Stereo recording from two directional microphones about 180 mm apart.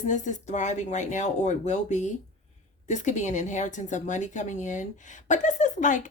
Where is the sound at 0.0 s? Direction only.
45° left (ahead or behind).